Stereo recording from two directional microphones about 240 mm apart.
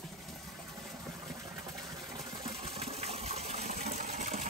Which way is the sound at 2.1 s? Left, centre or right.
Centre.